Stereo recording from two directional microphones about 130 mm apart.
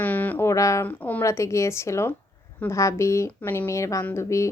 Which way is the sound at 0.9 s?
10° left (ahead or behind).